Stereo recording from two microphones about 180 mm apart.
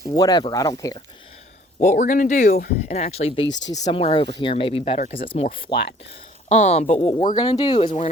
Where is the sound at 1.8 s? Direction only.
45° left (ahead or behind).